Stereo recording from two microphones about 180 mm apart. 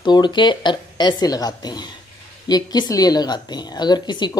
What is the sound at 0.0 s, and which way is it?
A woman's voice, 25° left (ahead or behind).